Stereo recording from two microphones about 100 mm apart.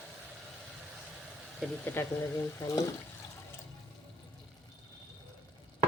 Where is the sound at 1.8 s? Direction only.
25° left (ahead or behind).